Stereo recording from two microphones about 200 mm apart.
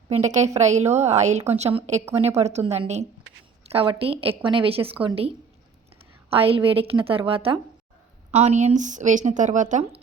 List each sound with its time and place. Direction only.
0.1 s a woman's voice: 35° right (ahead or behind)
6.3 s a woman's voice: 30° right (ahead or behind)